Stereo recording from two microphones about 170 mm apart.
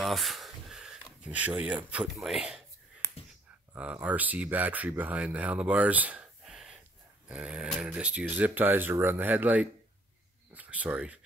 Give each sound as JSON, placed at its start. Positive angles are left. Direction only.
{"t": 0.0, "sound": "speech", "side_deg": 0}
{"t": 3.0, "sound": "clicking", "side_deg": 15}
{"t": 3.7, "sound": "speech", "side_deg": -10}